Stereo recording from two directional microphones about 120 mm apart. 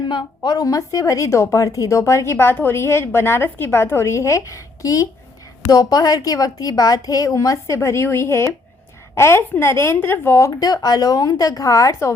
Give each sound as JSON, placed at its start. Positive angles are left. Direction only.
{"t": 0.1, "sound": "a woman's voice", "side_deg": 35}